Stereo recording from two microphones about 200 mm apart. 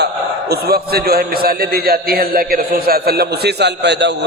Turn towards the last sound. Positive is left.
turn(degrees=-60)  # may be behind; listen again after turning